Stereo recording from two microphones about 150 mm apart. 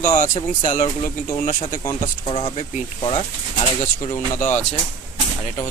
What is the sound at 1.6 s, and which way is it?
Speech, 30° left (ahead or behind).